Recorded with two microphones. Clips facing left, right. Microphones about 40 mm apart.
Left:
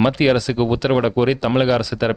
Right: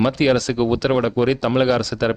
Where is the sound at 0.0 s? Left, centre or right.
Centre.